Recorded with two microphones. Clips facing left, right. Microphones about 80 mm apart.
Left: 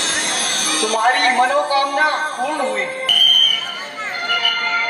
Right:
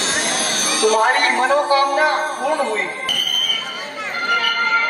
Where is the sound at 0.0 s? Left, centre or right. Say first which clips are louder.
Right 1 dB; left.